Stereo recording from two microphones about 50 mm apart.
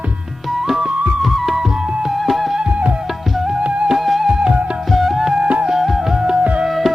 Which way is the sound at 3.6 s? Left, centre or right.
Right.